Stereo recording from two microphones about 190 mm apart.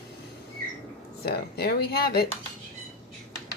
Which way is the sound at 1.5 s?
55° left (ahead or behind).